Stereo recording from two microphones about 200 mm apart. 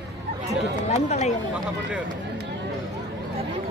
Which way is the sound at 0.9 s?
30° left (ahead or behind).